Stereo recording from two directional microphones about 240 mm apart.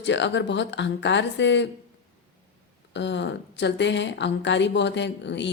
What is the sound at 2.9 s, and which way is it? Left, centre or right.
A woman's voice, left.